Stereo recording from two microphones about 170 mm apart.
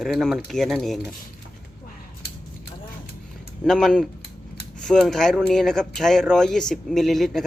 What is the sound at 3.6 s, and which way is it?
Speech, centre (ahead or behind).